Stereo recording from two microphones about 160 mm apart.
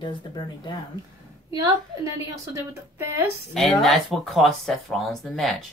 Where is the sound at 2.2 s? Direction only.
15° right (ahead or behind).